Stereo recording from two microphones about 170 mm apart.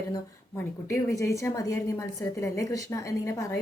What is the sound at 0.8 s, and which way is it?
A woman's voice, 15° left (ahead or behind).